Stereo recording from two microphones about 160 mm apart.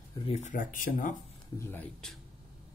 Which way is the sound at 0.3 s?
50° left (ahead or behind).